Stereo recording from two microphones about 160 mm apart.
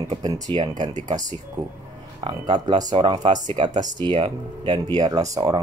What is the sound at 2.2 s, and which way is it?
Speech, 30° right (ahead or behind).